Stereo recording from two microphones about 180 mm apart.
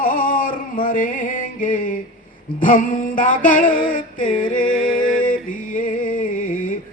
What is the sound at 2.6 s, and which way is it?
Music, 50° left (ahead or behind).